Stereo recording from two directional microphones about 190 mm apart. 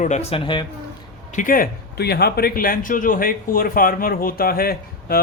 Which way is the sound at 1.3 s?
45° left (ahead or behind).